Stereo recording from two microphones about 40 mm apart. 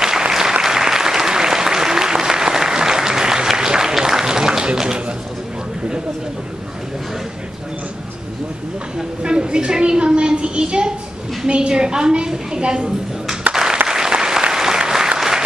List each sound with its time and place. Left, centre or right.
0.0 s applause: centre
8.9 s a woman's voice: right
13.5 s applause: centre